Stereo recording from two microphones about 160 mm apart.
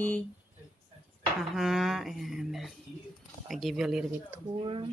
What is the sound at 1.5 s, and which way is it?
A woman's voice, centre (ahead or behind).